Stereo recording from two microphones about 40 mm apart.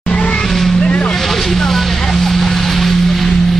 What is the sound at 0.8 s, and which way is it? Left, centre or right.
Vehicle, left.